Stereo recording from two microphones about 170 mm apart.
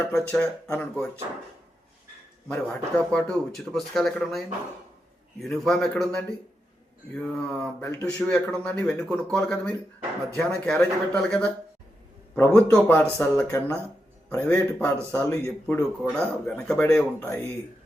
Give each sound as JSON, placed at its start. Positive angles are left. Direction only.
{"t": 0.1, "sound": "speech", "side_deg": 10}
{"t": 2.5, "sound": "speech", "side_deg": 5}